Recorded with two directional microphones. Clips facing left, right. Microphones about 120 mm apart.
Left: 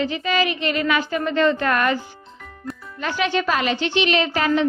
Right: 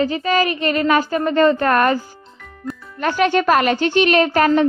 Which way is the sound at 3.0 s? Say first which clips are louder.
Right 6 dB; 50° right (ahead or behind).